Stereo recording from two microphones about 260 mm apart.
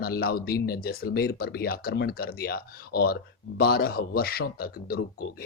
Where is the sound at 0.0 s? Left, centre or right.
Left.